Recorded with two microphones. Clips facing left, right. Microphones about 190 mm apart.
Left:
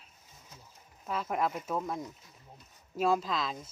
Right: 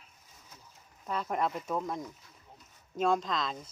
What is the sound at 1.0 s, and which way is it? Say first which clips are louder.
Speech: even; 5° left (ahead or behind).